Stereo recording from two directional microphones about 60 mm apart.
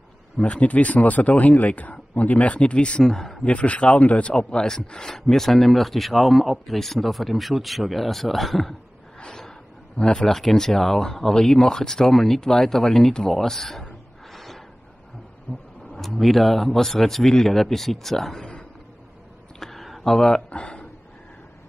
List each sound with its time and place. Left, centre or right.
0.4 s speech: left
3.4 s a man's voice: left; by 8.7 s centre
9.2 s gasp: centre
9.9 s speech: centre
15.5 s vehicle: left
15.9 s a man's voice: centre
19.6 s a sound: centre
20.4 s speech: centre